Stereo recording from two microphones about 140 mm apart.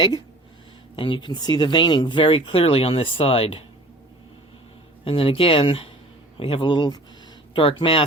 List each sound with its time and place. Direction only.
0.9 s speech: 35° left (ahead or behind)
5.0 s speech: 40° left (ahead or behind)